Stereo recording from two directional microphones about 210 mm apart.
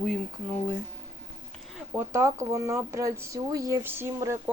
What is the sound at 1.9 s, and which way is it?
Speech, 15° right (ahead or behind).